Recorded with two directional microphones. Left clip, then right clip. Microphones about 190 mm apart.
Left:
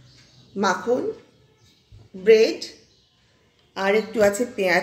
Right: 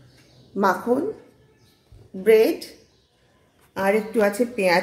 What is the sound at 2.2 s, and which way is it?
Speech, 55° right (ahead or behind).